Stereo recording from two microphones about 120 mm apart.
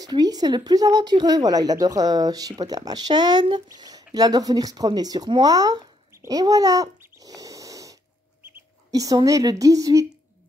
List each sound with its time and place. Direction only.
0.0 s speech: 35° right (ahead or behind)
7.0 s a sound: 30° right (ahead or behind)
8.9 s a woman's voice: 30° right (ahead or behind)